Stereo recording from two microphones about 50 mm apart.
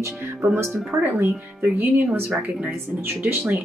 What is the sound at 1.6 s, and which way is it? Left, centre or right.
Speech, right.